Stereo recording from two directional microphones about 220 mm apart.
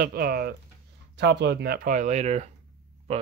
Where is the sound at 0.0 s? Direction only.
40° right (ahead or behind).